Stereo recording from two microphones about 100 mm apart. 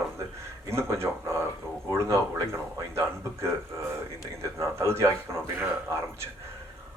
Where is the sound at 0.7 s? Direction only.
25° right (ahead or behind).